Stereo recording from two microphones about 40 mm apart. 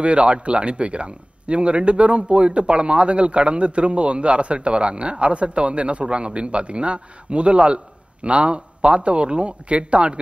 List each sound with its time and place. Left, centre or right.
0.0 s a man's voice: right